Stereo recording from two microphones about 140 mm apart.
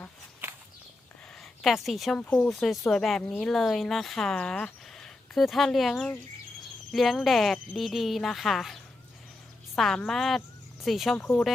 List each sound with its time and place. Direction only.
1.4 s speech: centre (ahead or behind)